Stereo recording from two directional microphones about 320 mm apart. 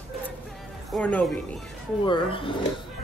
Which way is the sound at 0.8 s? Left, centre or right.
Centre.